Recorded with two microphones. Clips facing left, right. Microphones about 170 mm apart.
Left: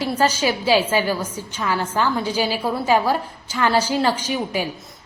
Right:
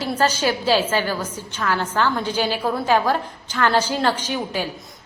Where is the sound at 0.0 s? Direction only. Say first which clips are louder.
Left 1 dB; 10° left (ahead or behind).